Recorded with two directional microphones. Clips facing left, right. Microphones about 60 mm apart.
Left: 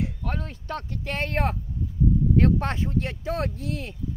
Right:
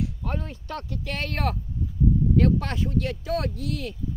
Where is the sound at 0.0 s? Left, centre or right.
Left.